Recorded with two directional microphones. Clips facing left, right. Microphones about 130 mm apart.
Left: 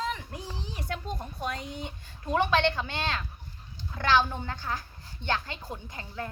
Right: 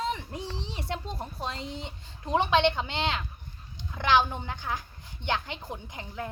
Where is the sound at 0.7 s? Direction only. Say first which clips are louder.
Even; 25° right (ahead or behind).